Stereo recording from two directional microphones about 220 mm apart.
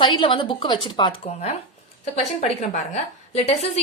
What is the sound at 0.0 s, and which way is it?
A woman's voice, 20° left (ahead or behind).